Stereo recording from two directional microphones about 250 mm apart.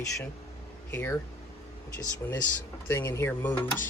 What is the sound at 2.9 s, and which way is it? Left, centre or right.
Speech, centre.